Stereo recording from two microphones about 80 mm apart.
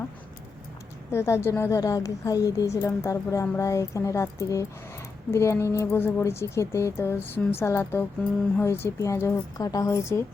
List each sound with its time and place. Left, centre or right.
1.1 s speech: left
1.8 s speech: left